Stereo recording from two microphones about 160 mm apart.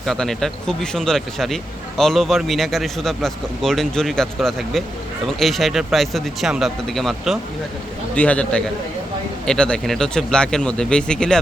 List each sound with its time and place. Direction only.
0.0 s a man's voice: 5° left (ahead or behind)